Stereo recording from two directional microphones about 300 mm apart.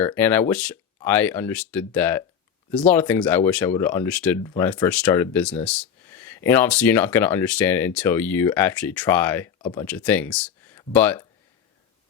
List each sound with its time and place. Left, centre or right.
0.0 s speech: centre